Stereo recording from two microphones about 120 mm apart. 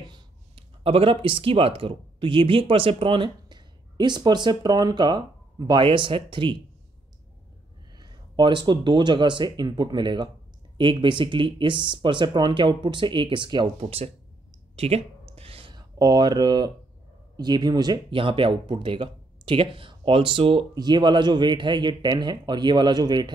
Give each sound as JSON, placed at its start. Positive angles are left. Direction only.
{"t": 0.0, "sound": "a sound", "side_deg": -40}
{"t": 0.8, "sound": "speech", "side_deg": -50}
{"t": 5.9, "sound": "speech", "side_deg": -45}
{"t": 8.0, "sound": "speech", "side_deg": -40}
{"t": 13.7, "sound": "speech", "side_deg": -55}
{"t": 14.8, "sound": "a sound", "side_deg": -60}
{"t": 15.7, "sound": "speech", "side_deg": -35}
{"t": 20.7, "sound": "speech", "side_deg": -35}